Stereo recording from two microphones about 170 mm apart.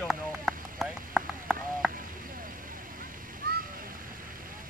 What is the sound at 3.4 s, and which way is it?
Splash, 60° right (ahead or behind).